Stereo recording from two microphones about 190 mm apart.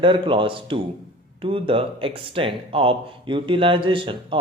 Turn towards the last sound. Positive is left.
turn(degrees=-25)  # may be behind; listen again after turning